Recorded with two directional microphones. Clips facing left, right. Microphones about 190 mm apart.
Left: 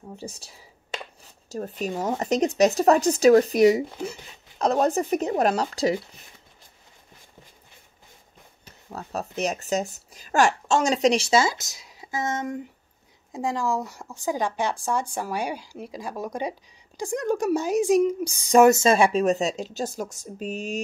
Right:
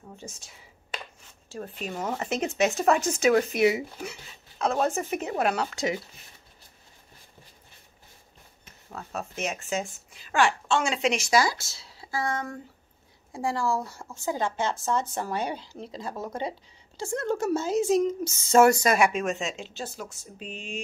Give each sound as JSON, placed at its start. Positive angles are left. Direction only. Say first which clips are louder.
{"t": 0.1, "sound": "a sound", "louder": "left 6 dB", "side_deg": 35}
{"t": 1.5, "sound": "speech", "louder": "left 6 dB", "side_deg": 40}
{"t": 8.6, "sound": "speech", "louder": "left 3 dB", "side_deg": 35}